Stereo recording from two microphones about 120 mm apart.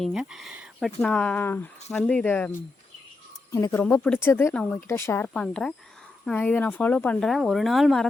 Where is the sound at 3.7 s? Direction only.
10° left (ahead or behind).